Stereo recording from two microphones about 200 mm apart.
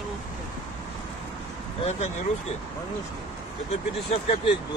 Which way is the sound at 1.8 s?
35° left (ahead or behind).